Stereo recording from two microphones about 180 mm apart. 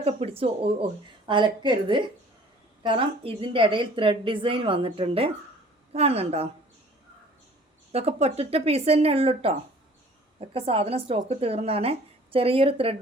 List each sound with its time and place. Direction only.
0.0 s a woman's voice: 35° right (ahead or behind)
7.9 s a woman's voice: 35° right (ahead or behind)